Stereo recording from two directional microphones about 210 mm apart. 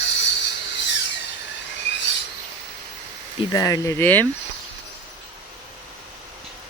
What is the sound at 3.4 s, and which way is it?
Speech, 15° left (ahead or behind).